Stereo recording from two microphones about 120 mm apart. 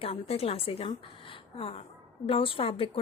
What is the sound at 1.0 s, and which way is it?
Gasp, 45° left (ahead or behind).